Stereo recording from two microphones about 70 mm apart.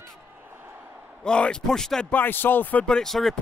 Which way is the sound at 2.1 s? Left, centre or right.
Left.